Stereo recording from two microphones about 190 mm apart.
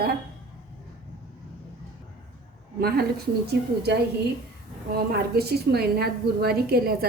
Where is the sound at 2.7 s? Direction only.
55° right (ahead or behind).